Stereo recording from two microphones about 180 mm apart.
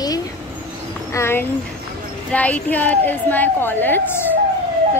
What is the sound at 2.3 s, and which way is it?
A woman's voice, 10° left (ahead or behind).